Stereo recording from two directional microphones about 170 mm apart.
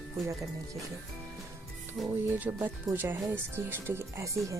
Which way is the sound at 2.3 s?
10° right (ahead or behind).